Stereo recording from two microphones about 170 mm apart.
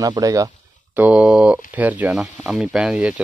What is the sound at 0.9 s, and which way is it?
Speech, 10° right (ahead or behind).